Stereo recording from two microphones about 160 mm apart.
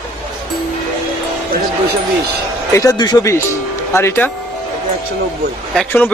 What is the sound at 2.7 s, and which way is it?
Speech, 25° left (ahead or behind).